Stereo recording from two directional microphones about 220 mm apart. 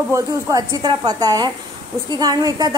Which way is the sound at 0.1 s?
15° right (ahead or behind).